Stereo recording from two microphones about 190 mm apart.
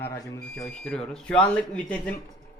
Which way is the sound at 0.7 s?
5° left (ahead or behind).